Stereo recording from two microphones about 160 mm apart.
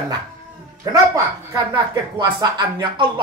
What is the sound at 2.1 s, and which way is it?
Speech, 30° right (ahead or behind).